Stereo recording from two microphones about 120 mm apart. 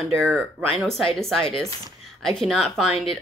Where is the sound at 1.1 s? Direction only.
Centre (ahead or behind).